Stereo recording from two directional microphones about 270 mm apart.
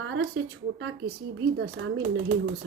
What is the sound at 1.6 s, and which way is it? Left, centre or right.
Speech, right.